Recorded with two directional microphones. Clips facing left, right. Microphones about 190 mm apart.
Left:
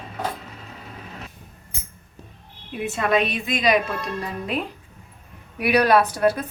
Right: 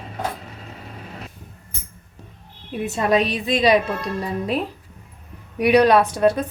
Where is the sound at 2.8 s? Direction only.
35° right (ahead or behind).